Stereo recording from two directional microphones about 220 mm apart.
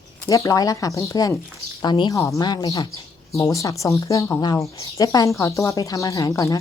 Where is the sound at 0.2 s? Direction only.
15° left (ahead or behind).